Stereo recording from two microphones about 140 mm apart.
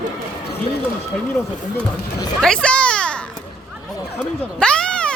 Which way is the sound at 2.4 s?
5° left (ahead or behind).